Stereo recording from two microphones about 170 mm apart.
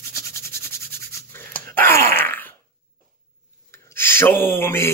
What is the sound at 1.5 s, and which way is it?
Groan, 55° right (ahead or behind).